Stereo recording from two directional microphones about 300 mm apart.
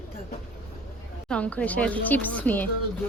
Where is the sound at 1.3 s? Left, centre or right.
Centre.